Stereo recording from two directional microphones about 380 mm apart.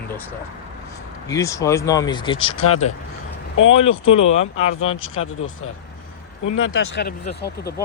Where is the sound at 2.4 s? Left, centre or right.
Left.